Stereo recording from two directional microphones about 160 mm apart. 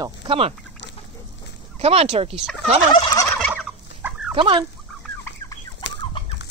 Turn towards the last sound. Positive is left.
turn(degrees=90)